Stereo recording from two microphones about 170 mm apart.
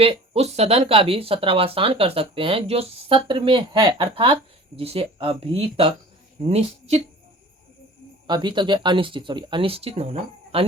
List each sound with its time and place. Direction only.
0.0 s speech: 35° right (ahead or behind)
8.3 s speech: 25° right (ahead or behind)